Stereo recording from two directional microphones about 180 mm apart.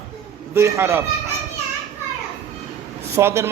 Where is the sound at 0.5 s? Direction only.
15° right (ahead or behind).